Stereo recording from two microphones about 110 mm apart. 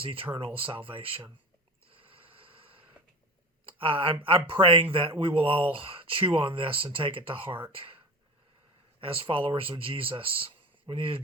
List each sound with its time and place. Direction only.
0.3 s speech: 55° right (ahead or behind)
1.9 s a sound: 55° right (ahead or behind)
3.7 s speech: 55° right (ahead or behind)
9.0 s speech: 55° right (ahead or behind)